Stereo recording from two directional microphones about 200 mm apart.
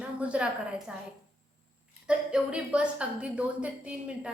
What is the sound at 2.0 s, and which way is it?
A woman's voice, 5° right (ahead or behind).